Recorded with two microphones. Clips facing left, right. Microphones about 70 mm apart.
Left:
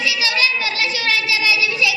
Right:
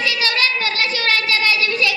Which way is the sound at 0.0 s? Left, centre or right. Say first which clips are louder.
Even; right.